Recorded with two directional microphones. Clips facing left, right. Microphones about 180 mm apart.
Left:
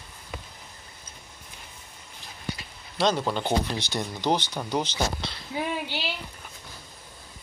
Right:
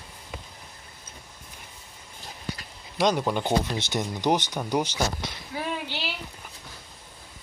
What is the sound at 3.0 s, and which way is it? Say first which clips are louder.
Speech: right 1 dB; 15° right (ahead or behind).